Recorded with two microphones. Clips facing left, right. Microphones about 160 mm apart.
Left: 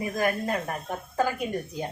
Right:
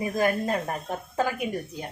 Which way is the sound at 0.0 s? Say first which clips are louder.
Right 2 dB; 30° right (ahead or behind).